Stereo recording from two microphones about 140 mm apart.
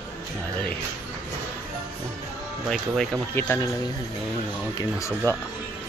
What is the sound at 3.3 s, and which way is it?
Speech, 15° left (ahead or behind).